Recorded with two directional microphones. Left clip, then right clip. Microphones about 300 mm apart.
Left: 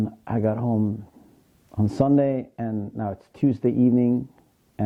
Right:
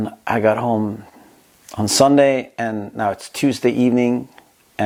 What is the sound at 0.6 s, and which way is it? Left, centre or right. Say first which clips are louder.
Speech: right 7 dB; right.